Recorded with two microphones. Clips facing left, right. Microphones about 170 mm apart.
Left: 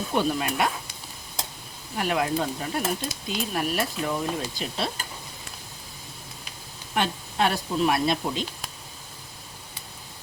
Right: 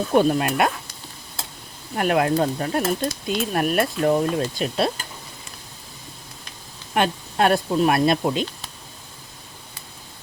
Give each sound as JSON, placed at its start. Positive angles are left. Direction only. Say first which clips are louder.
{"t": 0.1, "sound": "speech", "louder": "right 7 dB", "side_deg": -50}
{"t": 2.0, "sound": "speech", "louder": "right 6 dB", "side_deg": -55}
{"t": 6.9, "sound": "speech", "louder": "right 5 dB", "side_deg": -55}